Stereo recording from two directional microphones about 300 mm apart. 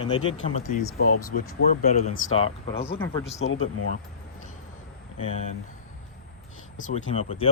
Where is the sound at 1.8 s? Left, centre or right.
Left.